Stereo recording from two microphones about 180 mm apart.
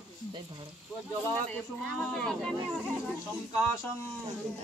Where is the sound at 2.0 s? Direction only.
5° left (ahead or behind).